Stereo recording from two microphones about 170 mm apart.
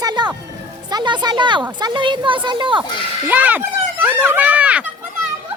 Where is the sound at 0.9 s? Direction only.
25° right (ahead or behind).